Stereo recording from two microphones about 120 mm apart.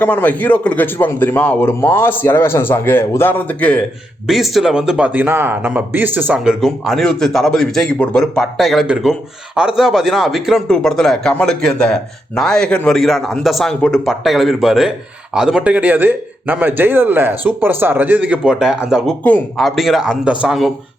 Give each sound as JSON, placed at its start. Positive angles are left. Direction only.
{"t": 0.0, "sound": "a man's voice", "side_deg": 15}
{"t": 4.3, "sound": "speech", "side_deg": 0}